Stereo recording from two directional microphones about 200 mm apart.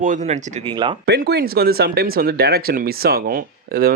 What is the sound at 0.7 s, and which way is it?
Speech, 25° right (ahead or behind).